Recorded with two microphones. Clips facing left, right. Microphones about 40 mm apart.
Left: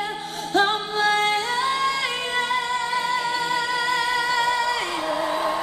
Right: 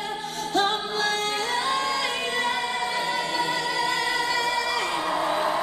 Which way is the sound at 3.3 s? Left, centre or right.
Centre.